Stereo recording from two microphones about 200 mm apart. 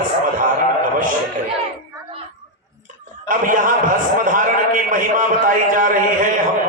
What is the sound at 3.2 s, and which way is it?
A man's voice, 40° right (ahead or behind).